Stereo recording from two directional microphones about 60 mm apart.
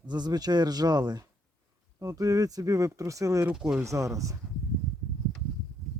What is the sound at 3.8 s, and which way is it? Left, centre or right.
Speech, right.